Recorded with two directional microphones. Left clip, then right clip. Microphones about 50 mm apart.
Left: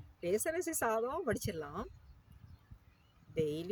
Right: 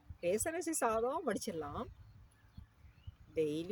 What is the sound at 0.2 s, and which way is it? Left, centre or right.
Speech, left.